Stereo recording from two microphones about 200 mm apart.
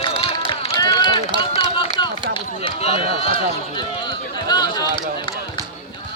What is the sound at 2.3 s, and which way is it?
Speech, 30° left (ahead or behind).